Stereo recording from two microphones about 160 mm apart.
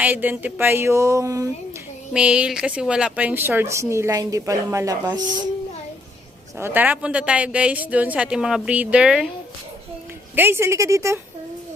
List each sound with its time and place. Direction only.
0.0 s speech: 10° right (ahead or behind)
2.1 s speech: 5° right (ahead or behind)
6.6 s speech: 10° right (ahead or behind)
10.3 s speech: 15° right (ahead or behind)